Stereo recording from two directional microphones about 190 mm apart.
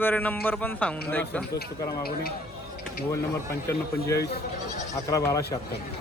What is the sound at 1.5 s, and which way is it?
Speech, 55° left (ahead or behind).